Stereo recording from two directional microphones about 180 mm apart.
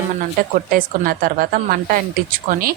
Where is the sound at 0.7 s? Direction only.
50° right (ahead or behind).